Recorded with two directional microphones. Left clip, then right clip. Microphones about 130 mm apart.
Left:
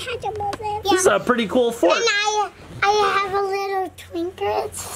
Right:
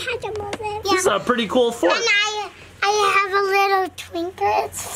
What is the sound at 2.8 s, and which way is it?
Child singing, 15° right (ahead or behind).